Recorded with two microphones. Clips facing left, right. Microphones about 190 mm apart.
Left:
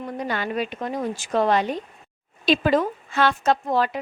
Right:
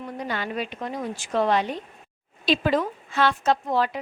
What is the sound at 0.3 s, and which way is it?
A woman's voice, 50° left (ahead or behind).